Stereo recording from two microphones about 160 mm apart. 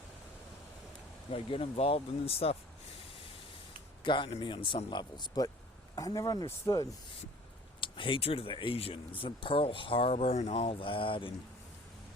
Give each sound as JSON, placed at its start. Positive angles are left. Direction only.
{"t": 1.3, "sound": "speech", "side_deg": 35}
{"t": 4.0, "sound": "speech", "side_deg": 30}